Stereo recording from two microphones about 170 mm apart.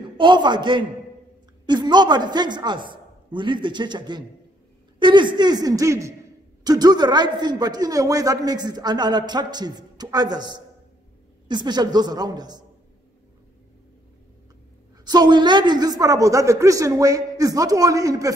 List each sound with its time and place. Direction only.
0.2 s a man's voice: 25° right (ahead or behind)
15.0 s a man's voice: 25° right (ahead or behind)